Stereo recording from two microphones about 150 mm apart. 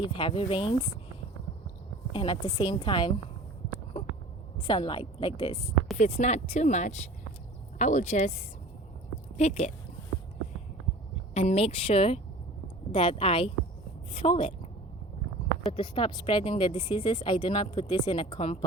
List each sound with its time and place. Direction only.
0.0 s speech: 35° left (ahead or behind)
2.1 s speech: 35° left (ahead or behind)
4.6 s speech: 35° left (ahead or behind)
6.0 s speech: 50° left (ahead or behind)
11.3 s speech: 45° left (ahead or behind)
15.7 s speech: 35° left (ahead or behind)